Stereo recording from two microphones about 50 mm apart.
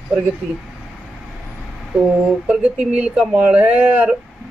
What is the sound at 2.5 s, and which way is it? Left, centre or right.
Speech, right.